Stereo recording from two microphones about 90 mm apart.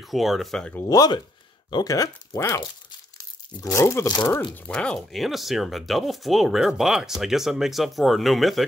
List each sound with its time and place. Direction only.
0.0 s speech: centre (ahead or behind)
0.8 s speech: 45° left (ahead or behind)
3.2 s tearing: 40° left (ahead or behind)
3.8 s speech: 30° left (ahead or behind)
4.6 s speech: 10° left (ahead or behind)